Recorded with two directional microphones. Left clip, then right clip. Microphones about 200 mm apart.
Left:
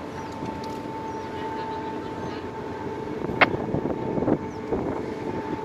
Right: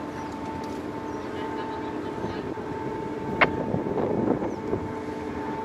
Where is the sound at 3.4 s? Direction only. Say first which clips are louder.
Left 2 dB; 15° left (ahead or behind).